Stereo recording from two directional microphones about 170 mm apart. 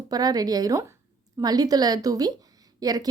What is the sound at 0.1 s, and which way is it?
A woman's voice, 25° right (ahead or behind).